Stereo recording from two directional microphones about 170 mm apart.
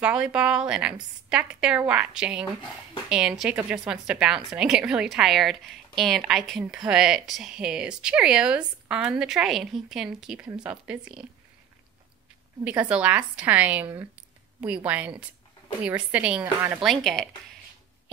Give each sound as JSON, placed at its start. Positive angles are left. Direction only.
{"t": 0.0, "sound": "a woman's voice", "side_deg": -5}
{"t": 12.6, "sound": "a woman's voice", "side_deg": -5}
{"t": 16.9, "sound": "a woman's voice", "side_deg": 5}